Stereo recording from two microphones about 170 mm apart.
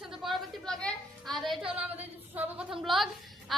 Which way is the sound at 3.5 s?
Centre (ahead or behind).